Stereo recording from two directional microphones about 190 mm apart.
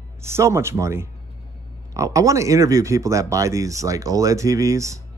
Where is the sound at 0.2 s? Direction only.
15° right (ahead or behind).